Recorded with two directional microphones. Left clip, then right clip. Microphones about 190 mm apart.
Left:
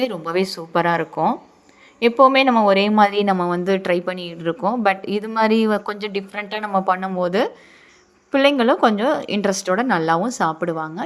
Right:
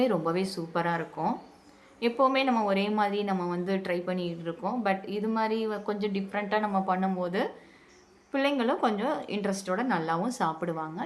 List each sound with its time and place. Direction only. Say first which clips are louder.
0.3 s a woman's voice: left 8 dB; 35° left (ahead or behind)